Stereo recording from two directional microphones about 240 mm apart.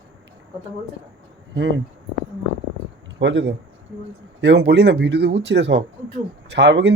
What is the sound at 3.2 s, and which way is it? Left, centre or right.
Speech, right.